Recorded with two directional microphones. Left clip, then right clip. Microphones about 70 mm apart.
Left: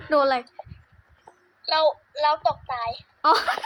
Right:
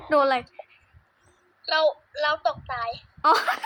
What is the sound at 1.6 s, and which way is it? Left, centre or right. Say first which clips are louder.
A child's voice: left 1 dB; right.